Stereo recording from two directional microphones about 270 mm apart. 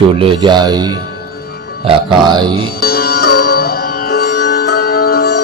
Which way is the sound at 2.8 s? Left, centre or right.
Left.